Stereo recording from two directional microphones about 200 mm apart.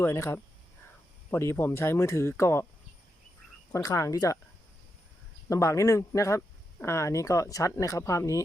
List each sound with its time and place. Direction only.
0.0 s speech: 15° left (ahead or behind)
3.7 s speech: 15° left (ahead or behind)
5.5 s speech: 15° left (ahead or behind)